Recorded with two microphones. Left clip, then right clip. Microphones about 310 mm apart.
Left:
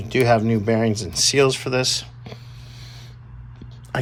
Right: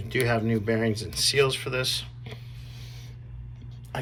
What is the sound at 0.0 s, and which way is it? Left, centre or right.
Speech, centre.